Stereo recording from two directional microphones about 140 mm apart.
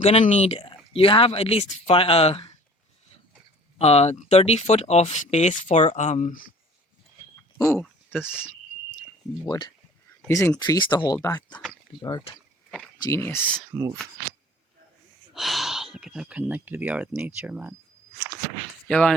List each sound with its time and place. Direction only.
0.0 s speech: 55° left (ahead or behind)
3.8 s speech: 50° left (ahead or behind); by 6.5 s 75° left (ahead or behind)
8.2 s speech: 15° left (ahead or behind)
9.5 s speech: 30° left (ahead or behind)
10.2 s speech: 20° left (ahead or behind)
10.6 s speech: 30° left (ahead or behind)
11.5 s speech: centre (ahead or behind)
13.0 s speech: 20° left (ahead or behind)
13.7 s speech: 25° right (ahead or behind)
15.3 s speech: centre (ahead or behind)
18.9 s speech: 5° left (ahead or behind)